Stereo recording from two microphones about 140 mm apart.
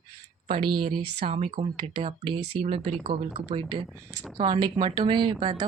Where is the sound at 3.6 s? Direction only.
35° right (ahead or behind).